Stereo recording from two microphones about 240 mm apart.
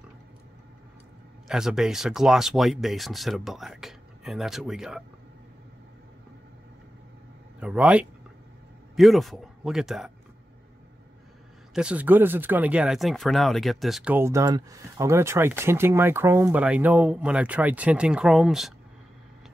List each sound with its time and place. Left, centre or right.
1.5 s speech: centre
7.6 s speech: centre
11.7 s speech: centre